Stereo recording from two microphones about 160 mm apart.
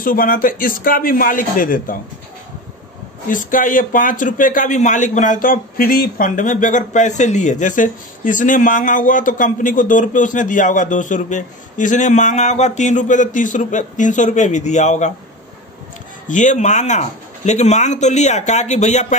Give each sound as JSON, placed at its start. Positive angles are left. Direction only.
{"t": 0.0, "sound": "speech", "side_deg": 60}
{"t": 3.3, "sound": "a man's voice", "side_deg": 55}
{"t": 16.3, "sound": "a man's voice", "side_deg": 50}